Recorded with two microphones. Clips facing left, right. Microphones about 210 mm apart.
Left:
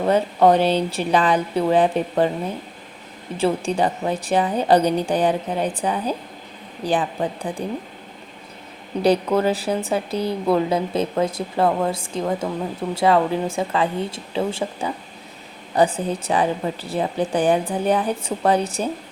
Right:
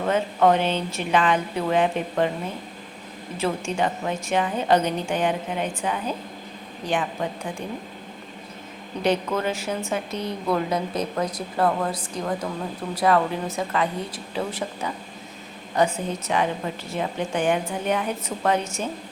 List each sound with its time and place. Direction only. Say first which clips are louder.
0.0 s a woman's voice: left 4 dB; 35° left (ahead or behind)
3.3 s a woman's voice: left 5 dB; 30° left (ahead or behind)
9.0 s a woman's voice: left 5 dB; 35° left (ahead or behind)